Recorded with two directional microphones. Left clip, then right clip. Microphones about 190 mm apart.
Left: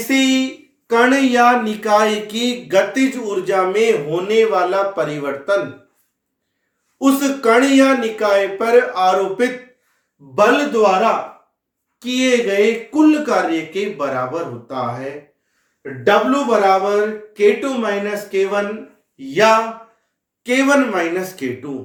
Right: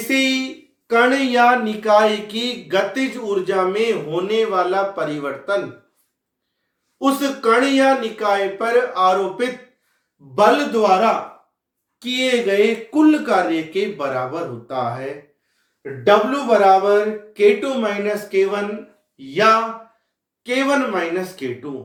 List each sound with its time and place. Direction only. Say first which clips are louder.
0.1 s speech: left 2 dB; 5° right (ahead or behind); by 5.5 s 30° left (ahead or behind)
7.0 s speech: left 2 dB; 25° left (ahead or behind)
10.3 s speech: left 1 dB; centre (ahead or behind)
11.9 s speech: left 2 dB; 15° right (ahead or behind)
19.1 s speech: left 2 dB; 15° left (ahead or behind)